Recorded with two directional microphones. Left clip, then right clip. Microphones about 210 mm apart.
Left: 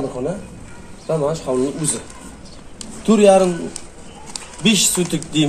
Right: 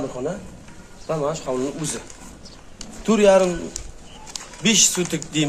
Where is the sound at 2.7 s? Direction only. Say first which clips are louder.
Left 4 dB; 10° right (ahead or behind).